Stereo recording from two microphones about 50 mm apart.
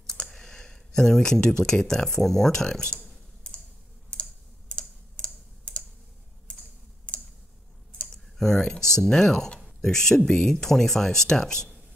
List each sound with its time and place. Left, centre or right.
0.0 s speech: centre
2.8 s speech: left
3.4 s typing: left
7.1 s typing: left
8.1 s speech: centre